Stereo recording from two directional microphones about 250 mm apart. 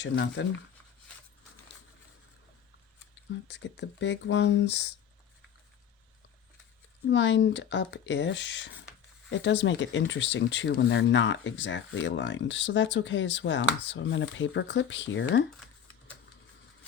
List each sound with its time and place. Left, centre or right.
0.0 s speech: left
3.5 s speech: left
7.1 s speech: left